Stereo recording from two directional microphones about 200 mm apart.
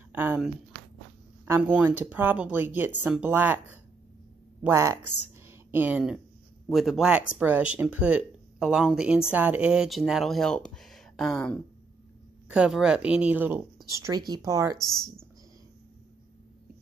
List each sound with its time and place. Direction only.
0.1 s speech: 10° right (ahead or behind)
4.6 s speech: 15° right (ahead or behind)
14.0 s speech: 20° right (ahead or behind)